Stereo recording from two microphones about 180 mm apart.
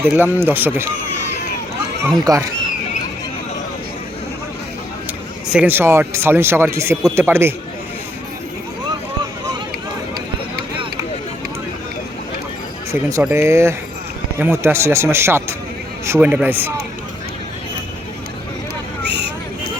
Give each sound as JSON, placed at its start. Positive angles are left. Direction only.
{"t": 0.0, "sound": "speech", "side_deg": -10}
{"t": 2.1, "sound": "speech", "side_deg": -20}
{"t": 5.5, "sound": "speech", "side_deg": -10}
{"t": 12.9, "sound": "speech", "side_deg": -15}
{"t": 19.0, "sound": "vehicle", "side_deg": -70}